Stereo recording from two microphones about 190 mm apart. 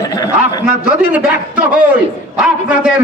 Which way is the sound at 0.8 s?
5° right (ahead or behind).